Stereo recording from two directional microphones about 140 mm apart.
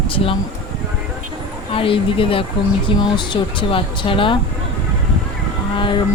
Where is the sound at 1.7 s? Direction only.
40° left (ahead or behind).